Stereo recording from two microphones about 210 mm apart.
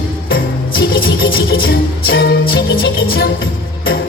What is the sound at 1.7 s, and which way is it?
Music, 50° left (ahead or behind).